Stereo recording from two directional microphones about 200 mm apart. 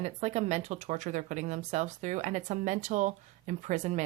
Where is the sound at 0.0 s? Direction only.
35° right (ahead or behind).